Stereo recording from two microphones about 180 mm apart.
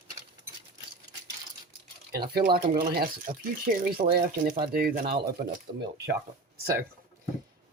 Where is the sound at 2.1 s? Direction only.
60° right (ahead or behind).